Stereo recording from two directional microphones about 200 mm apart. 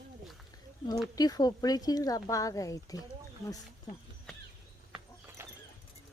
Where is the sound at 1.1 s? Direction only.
20° left (ahead or behind).